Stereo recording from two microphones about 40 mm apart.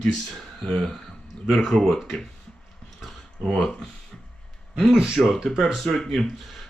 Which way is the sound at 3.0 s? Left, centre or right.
Centre.